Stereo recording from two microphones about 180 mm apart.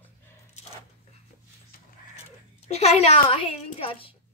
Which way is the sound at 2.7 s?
35° left (ahead or behind).